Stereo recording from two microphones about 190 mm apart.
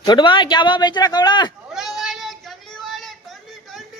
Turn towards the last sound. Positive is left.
turn(degrees=0)  # may be behind; listen again after turning